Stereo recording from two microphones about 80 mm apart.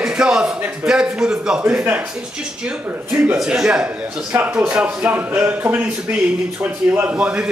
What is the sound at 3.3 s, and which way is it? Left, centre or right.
A man's voice, centre.